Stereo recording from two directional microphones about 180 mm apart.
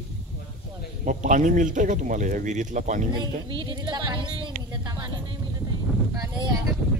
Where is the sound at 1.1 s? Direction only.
45° right (ahead or behind).